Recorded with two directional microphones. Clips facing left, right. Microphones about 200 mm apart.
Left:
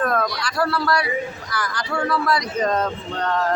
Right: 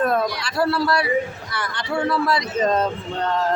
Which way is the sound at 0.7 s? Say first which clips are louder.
Right 2 dB; 25° right (ahead or behind).